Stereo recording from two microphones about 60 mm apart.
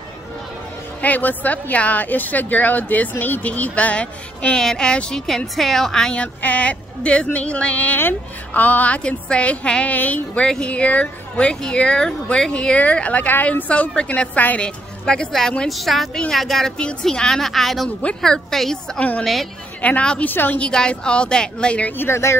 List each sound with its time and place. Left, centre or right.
1.0 s a woman's voice: left; by 6.1 s centre
6.1 s a woman's voice: left
15.7 s a woman's voice: centre
17.8 s a woman's voice: centre
18.9 s speech: left
20.2 s a woman's voice: left
20.5 s a woman's voice: centre
21.9 s speech: left